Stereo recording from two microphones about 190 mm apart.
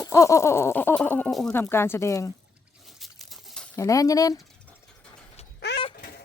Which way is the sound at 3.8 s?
15° left (ahead or behind).